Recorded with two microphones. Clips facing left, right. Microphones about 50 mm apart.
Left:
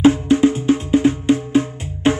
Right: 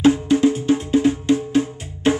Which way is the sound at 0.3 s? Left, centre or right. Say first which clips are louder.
Left 2 dB; left.